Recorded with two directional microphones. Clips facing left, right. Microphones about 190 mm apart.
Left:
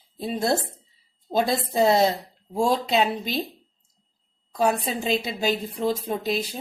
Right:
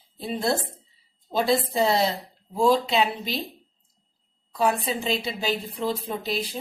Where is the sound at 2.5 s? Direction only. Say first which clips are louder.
Right 1 dB; 45° left (ahead or behind).